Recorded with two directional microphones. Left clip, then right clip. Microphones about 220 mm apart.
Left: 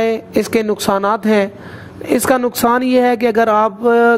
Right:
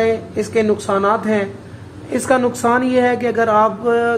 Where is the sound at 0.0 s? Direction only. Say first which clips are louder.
Left 2 dB; 45° left (ahead or behind).